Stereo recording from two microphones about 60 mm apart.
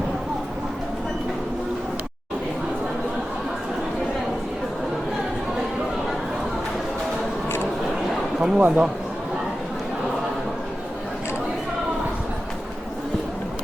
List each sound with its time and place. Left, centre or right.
8.4 s a man's voice: centre